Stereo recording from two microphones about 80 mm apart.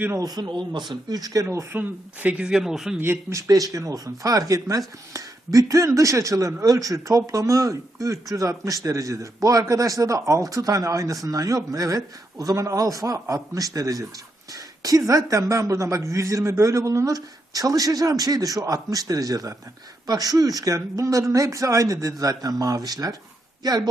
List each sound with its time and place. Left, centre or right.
0.2 s speech: right
0.7 s speech: right
1.5 s speech: right
2.5 s speech: centre
3.0 s speech: right
3.3 s speech: right